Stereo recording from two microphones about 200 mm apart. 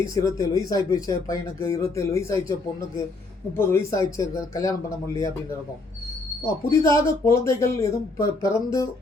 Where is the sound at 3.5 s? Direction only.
15° left (ahead or behind).